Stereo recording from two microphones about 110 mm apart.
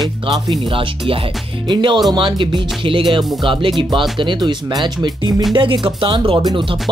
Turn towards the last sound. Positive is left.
turn(degrees=-50)  # may be behind; listen again after turning